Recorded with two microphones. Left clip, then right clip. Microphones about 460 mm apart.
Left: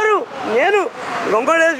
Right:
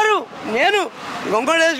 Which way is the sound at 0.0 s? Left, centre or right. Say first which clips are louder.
Left 1 dB; right.